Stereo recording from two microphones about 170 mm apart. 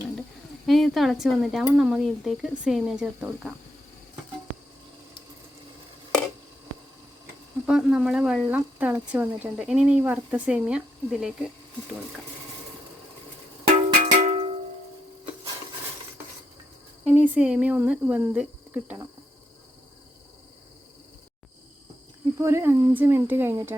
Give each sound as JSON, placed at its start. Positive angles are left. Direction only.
{"t": 0.7, "sound": "speech", "side_deg": 0}
{"t": 7.7, "sound": "a woman's voice", "side_deg": -5}
{"t": 13.7, "sound": "music", "side_deg": -45}
{"t": 17.1, "sound": "speech", "side_deg": -10}
{"t": 22.4, "sound": "a woman's voice", "side_deg": -15}